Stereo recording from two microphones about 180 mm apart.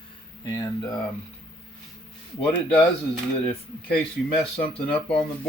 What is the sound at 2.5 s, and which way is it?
Speech, 30° left (ahead or behind).